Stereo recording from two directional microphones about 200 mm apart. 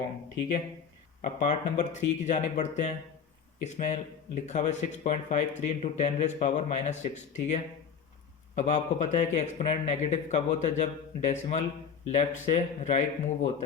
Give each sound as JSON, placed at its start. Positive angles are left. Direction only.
{"t": 1.2, "sound": "speech", "side_deg": 35}